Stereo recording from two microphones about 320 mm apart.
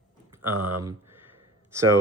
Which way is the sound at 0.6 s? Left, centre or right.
Right.